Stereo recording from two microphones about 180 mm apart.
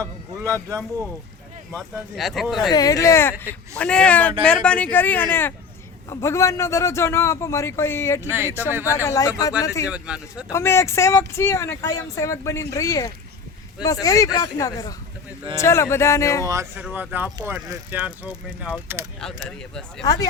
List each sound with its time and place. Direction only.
0.7 s speech: 15° right (ahead or behind)
1.7 s speech: centre (ahead or behind)
2.7 s speech: 20° left (ahead or behind)
8.3 s speech: 10° right (ahead or behind)
9.0 s speech: 20° left (ahead or behind)
9.9 s speech: 5° right (ahead or behind)
10.5 s speech: 15° left (ahead or behind)
16.5 s speech: 15° right (ahead or behind)
19.2 s speech: 5° left (ahead or behind)